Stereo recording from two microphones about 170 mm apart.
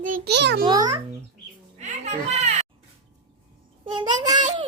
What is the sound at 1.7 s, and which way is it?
Speech, 45° right (ahead or behind).